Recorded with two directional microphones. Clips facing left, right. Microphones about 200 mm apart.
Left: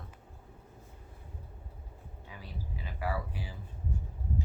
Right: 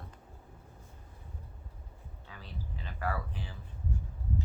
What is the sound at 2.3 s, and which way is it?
Speech, 10° left (ahead or behind).